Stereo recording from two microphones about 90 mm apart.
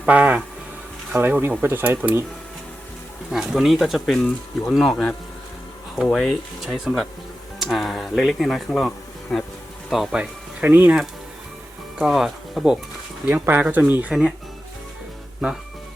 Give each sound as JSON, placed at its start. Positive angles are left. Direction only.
{"t": 0.0, "sound": "speech", "side_deg": -15}
{"t": 3.3, "sound": "speech", "side_deg": -5}
{"t": 10.2, "sound": "speech", "side_deg": -20}
{"t": 11.9, "sound": "speech", "side_deg": -5}
{"t": 13.3, "sound": "speech", "side_deg": -25}
{"t": 14.1, "sound": "speech", "side_deg": 0}